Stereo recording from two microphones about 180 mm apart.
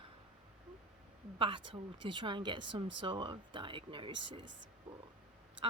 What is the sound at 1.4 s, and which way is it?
A woman's voice, 30° right (ahead or behind).